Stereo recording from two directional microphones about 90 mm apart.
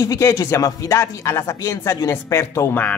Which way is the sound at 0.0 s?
35° left (ahead or behind).